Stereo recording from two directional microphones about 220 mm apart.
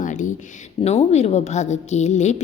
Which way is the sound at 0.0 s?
35° left (ahead or behind).